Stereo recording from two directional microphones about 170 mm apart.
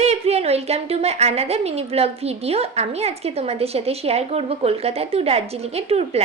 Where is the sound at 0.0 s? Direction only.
40° right (ahead or behind).